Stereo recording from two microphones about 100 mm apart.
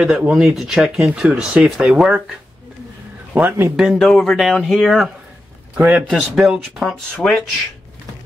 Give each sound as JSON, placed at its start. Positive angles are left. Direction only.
{"t": 0.0, "sound": "speech", "side_deg": -10}
{"t": 3.3, "sound": "speech", "side_deg": -20}
{"t": 3.7, "sound": "speech", "side_deg": -5}
{"t": 4.0, "sound": "speech", "side_deg": 5}
{"t": 5.8, "sound": "speech", "side_deg": -15}
{"t": 6.0, "sound": "speech", "side_deg": -5}